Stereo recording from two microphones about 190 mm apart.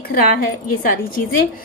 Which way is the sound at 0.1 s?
50° left (ahead or behind).